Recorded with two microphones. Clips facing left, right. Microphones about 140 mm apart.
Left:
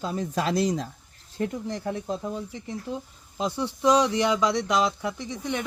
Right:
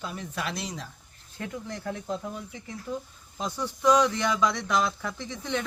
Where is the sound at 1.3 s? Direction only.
25° left (ahead or behind).